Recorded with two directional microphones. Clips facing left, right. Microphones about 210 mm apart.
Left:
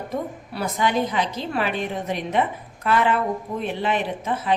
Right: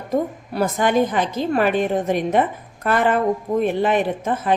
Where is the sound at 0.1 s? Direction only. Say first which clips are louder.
Right 11 dB; 50° right (ahead or behind).